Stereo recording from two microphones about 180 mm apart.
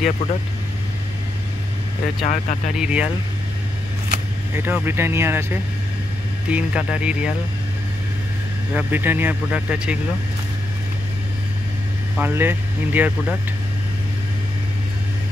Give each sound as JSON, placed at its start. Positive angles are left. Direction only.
{"t": 2.2, "sound": "speech", "side_deg": 45}
{"t": 2.7, "sound": "speech", "side_deg": -5}
{"t": 4.6, "sound": "speech", "side_deg": -10}
{"t": 8.7, "sound": "speech", "side_deg": -10}
{"t": 12.2, "sound": "speech", "side_deg": -10}